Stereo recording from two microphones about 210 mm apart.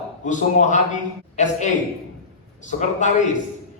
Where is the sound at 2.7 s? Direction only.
35° left (ahead or behind).